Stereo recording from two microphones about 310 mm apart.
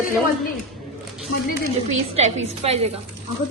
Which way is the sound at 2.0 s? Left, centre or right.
Right.